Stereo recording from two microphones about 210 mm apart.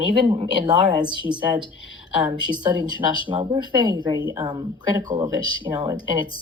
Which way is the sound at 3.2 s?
20° right (ahead or behind).